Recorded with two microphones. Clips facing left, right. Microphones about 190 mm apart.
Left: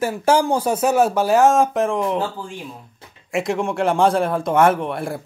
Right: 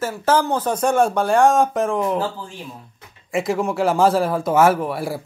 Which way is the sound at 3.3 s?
Centre (ahead or behind).